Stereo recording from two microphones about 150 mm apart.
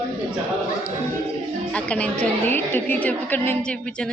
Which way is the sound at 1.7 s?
10° left (ahead or behind).